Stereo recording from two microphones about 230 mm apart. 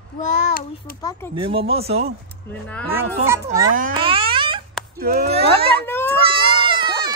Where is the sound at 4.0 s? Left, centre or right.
Right.